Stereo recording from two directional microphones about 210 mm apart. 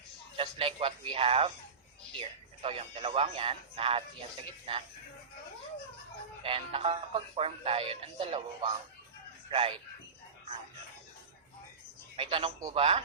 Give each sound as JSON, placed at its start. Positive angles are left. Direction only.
{"t": 0.3, "sound": "speech", "side_deg": -25}
{"t": 6.4, "sound": "speech", "side_deg": -25}
{"t": 12.1, "sound": "speech", "side_deg": -25}